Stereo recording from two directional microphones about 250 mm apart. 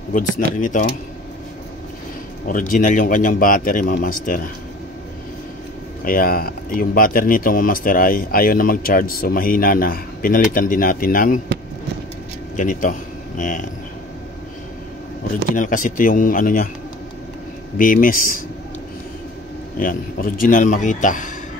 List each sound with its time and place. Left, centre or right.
0.6 s speech: left
2.4 s speech: left
6.0 s speech: left
12.5 s speech: left
15.5 s speech: left
17.7 s speech: left
19.8 s speech: left